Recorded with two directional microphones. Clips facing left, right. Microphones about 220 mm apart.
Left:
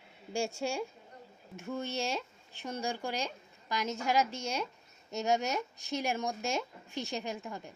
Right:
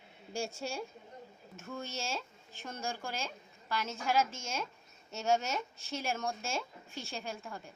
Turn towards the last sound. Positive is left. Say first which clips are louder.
# left 3 dB
turn(degrees=20)  # may be behind; listen again after turning